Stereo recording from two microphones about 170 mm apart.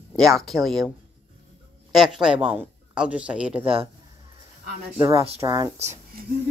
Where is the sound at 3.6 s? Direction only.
35° right (ahead or behind).